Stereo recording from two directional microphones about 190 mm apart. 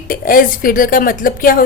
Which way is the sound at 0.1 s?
50° left (ahead or behind).